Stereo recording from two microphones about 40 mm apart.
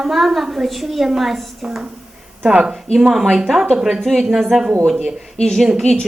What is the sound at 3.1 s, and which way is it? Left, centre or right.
Speech, centre.